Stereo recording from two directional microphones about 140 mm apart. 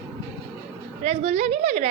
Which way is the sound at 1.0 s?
50° right (ahead or behind).